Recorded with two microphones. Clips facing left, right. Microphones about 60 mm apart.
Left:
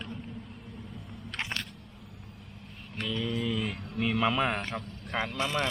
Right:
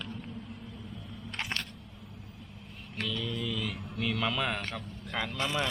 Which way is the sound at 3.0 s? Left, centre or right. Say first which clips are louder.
Left 3 dB; left.